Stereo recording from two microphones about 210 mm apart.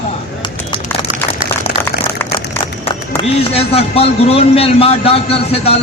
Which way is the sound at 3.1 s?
25° left (ahead or behind).